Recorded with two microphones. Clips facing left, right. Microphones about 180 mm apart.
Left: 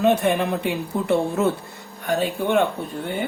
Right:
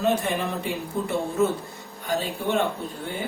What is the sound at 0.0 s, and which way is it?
Speech, 65° left (ahead or behind).